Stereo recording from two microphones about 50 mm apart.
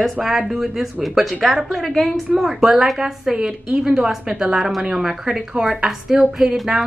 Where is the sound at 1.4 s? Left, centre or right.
Centre.